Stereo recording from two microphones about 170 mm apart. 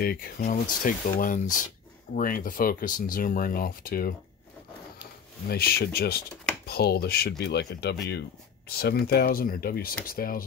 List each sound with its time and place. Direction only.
0.0 s speech: 60° left (ahead or behind)
5.5 s speech: 65° left (ahead or behind)